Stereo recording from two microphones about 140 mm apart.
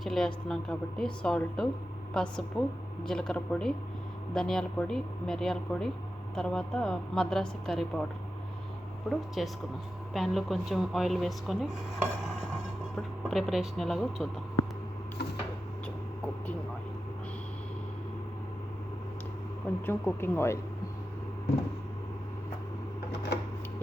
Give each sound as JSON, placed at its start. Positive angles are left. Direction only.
{"t": 0.0, "sound": "speech", "side_deg": 0}
{"t": 9.0, "sound": "speech", "side_deg": 0}
{"t": 19.8, "sound": "speech", "side_deg": 15}